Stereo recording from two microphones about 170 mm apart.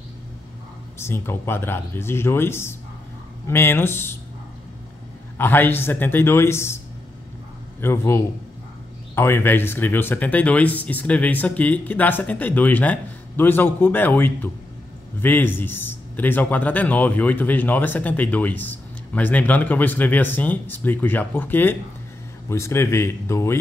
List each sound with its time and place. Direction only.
0.9 s a man's voice: 15° left (ahead or behind)
5.4 s a man's voice: 10° left (ahead or behind)
7.8 s a man's voice: 15° left (ahead or behind)